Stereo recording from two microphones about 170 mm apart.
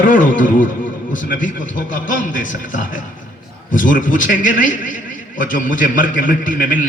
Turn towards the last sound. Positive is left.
turn(degrees=50)  # may be behind; listen again after turning